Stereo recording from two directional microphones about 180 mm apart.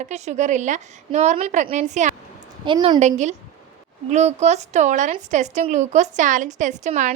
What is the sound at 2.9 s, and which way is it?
A woman's voice, 40° right (ahead or behind).